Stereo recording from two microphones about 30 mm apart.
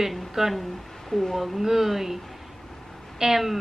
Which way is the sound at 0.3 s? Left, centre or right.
Centre.